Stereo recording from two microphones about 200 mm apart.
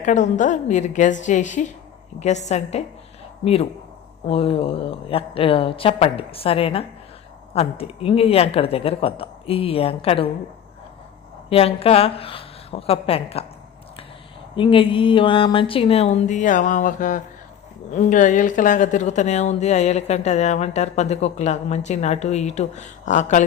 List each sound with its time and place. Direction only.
0.0 s a woman's voice: 40° left (ahead or behind)
11.4 s a woman's voice: 30° left (ahead or behind)
14.5 s a woman's voice: 25° left (ahead or behind)